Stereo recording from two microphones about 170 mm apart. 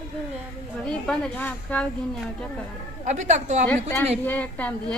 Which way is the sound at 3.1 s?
45° right (ahead or behind).